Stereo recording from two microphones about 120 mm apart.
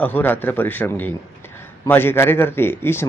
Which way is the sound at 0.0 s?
15° left (ahead or behind).